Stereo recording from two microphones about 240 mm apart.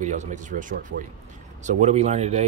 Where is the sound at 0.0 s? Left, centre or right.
Right.